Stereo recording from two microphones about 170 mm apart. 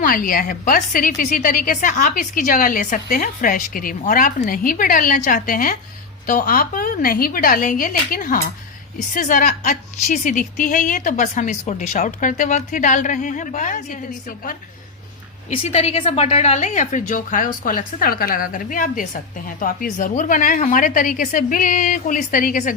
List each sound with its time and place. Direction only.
0.0 s a woman's voice: 55° left (ahead or behind)
15.4 s a woman's voice: 40° left (ahead or behind)